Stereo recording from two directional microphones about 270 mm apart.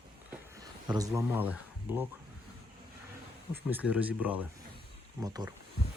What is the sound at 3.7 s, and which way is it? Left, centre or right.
Speech, centre.